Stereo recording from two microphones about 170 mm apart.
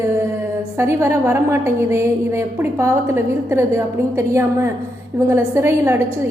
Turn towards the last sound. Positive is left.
turn(degrees=-15)  # may be behind; listen again after turning